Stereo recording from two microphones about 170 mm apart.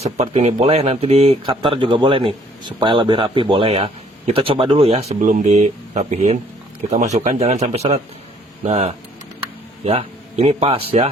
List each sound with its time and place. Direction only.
0.0 s speech: 40° right (ahead or behind)